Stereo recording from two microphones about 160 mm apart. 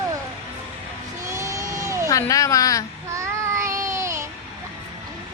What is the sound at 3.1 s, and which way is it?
Child singing, 20° right (ahead or behind).